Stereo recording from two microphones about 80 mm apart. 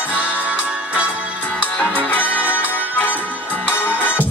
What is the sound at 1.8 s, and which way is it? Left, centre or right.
Music, centre.